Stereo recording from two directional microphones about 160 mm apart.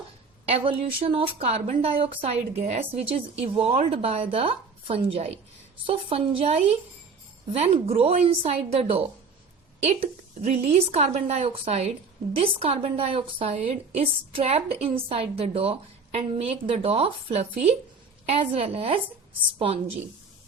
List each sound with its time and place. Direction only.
0.4 s a woman's voice: 35° right (ahead or behind)